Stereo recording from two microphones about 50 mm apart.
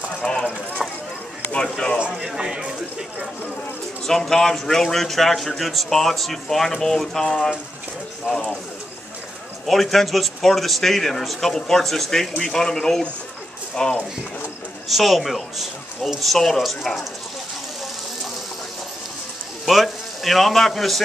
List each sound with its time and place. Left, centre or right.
0.2 s a man's voice: centre
0.8 s a sound: centre
1.5 s speech: centre
2.0 s speech: centre
4.0 s a man's voice: centre
9.7 s a man's voice: centre
14.9 s a man's voice: centre
19.6 s speech: centre